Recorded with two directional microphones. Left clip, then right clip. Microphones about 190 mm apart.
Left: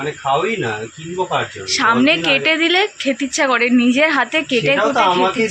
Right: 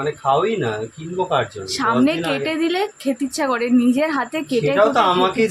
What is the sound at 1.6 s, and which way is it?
A woman's voice, 10° right (ahead or behind).